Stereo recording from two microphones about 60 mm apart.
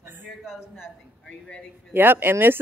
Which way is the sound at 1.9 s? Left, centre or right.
Right.